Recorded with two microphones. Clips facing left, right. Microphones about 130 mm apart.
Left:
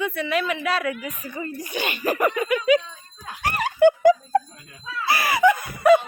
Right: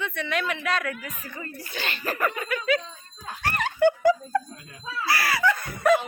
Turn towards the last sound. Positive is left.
turn(degrees=5)  # may be behind; listen again after turning